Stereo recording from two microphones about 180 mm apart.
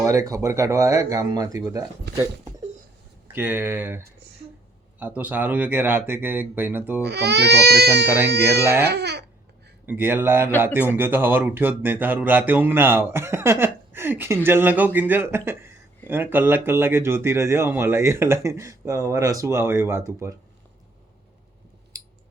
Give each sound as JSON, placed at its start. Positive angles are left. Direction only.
{"t": 0.0, "sound": "speech", "side_deg": -20}
{"t": 2.1, "sound": "speech", "side_deg": -70}
{"t": 3.3, "sound": "speech", "side_deg": -10}
{"t": 7.0, "sound": "speech", "side_deg": -65}
{"t": 8.0, "sound": "speech", "side_deg": -10}
{"t": 8.9, "sound": "speech", "side_deg": -65}
{"t": 9.8, "sound": "speech", "side_deg": -10}